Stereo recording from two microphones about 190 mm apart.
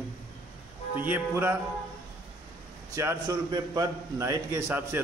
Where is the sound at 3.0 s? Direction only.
15° right (ahead or behind).